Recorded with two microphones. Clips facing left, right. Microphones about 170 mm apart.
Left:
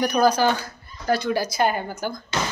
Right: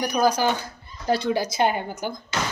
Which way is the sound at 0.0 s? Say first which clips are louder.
Left 2 dB; 10° right (ahead or behind).